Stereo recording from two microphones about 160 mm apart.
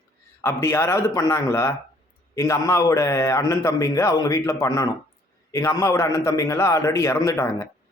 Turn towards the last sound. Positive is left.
turn(degrees=20)  # may be behind; listen again after turning